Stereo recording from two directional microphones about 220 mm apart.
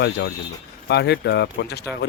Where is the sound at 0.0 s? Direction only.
50° left (ahead or behind).